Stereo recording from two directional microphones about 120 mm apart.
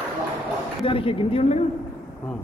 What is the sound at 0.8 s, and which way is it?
Speech, 50° left (ahead or behind).